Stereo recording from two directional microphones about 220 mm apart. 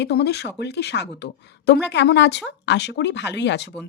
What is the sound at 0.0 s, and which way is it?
A woman's voice, 50° left (ahead or behind).